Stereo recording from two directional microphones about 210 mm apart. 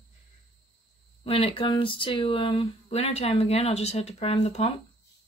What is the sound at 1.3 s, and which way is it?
Speech, 30° left (ahead or behind).